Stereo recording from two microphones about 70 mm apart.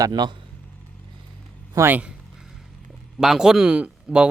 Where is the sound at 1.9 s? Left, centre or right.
Right.